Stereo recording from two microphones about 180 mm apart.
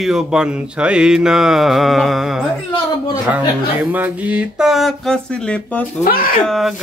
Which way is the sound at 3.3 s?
10° right (ahead or behind).